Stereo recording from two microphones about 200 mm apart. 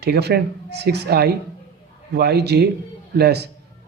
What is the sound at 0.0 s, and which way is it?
A man's voice, 55° right (ahead or behind).